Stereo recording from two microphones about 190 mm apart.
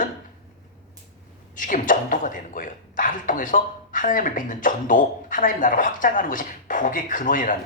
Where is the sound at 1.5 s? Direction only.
45° left (ahead or behind).